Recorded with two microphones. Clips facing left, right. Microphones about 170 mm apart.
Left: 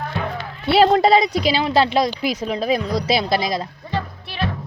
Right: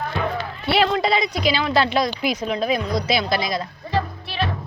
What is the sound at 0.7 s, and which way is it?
A woman's voice, 40° left (ahead or behind).